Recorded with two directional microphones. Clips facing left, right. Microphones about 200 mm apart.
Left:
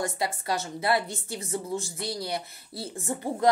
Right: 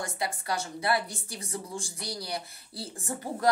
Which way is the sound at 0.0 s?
25° left (ahead or behind).